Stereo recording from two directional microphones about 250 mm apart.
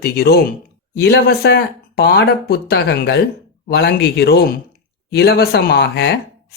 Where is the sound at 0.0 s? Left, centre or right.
Left.